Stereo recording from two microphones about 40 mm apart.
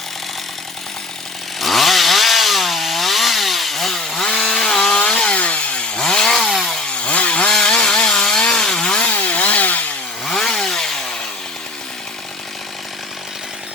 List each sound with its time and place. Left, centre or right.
1.5 s chainsaw: centre
4.9 s chainsaw: left
7.0 s chainsaw: left
7.5 s wood: centre
9.1 s chainsaw: left
10.2 s chainsaw: centre